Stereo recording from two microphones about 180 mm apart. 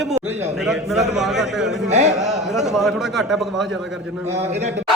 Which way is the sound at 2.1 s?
Centre (ahead or behind).